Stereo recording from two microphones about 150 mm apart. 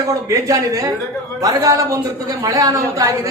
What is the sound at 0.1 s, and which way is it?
A woman's voice, 20° right (ahead or behind).